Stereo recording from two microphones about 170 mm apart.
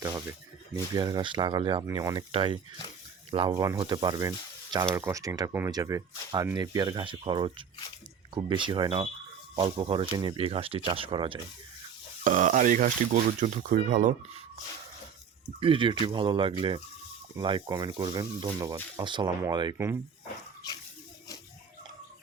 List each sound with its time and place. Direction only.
0.0 s speech: 15° right (ahead or behind)
3.5 s speech: 15° right (ahead or behind)
12.2 s speech: 50° right (ahead or behind)
15.6 s speech: 30° right (ahead or behind)